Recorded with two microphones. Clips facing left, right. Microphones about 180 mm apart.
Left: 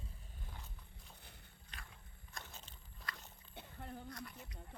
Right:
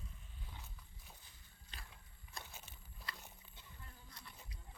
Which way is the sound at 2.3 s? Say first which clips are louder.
Even; 10° right (ahead or behind).